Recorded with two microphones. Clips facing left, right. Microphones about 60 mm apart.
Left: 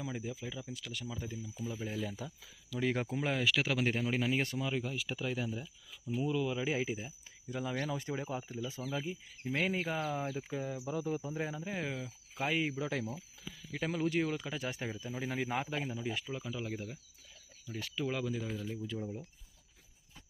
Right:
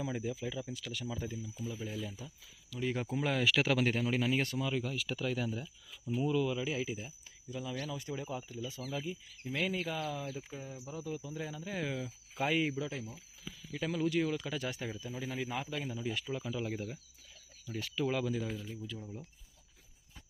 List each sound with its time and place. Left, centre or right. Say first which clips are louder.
0.0 s speech: right 3 dB; centre
1.8 s speech: left 3 dB; left
2.0 s speech: left 4 dB; left
3.1 s speech: right 1 dB; centre
3.4 s speech: right 3 dB; centre
6.5 s speech: left 1 dB; left
7.5 s speech: left 3 dB; left
10.5 s speech: left 7 dB; left
11.0 s speech: left 4 dB; left
11.6 s speech: right 1 dB; centre
13.7 s speech: even; left
15.0 s speech: left 3 dB; left
16.0 s speech: even; centre
16.2 s speech: right 2 dB; centre